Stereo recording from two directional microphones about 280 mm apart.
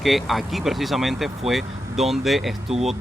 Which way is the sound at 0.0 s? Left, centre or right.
Centre.